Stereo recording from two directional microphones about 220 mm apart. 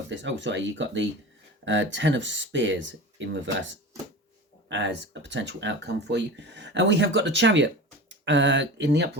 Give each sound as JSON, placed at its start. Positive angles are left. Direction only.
{"t": 0.1, "sound": "speech", "side_deg": -55}
{"t": 4.7, "sound": "speech", "side_deg": -55}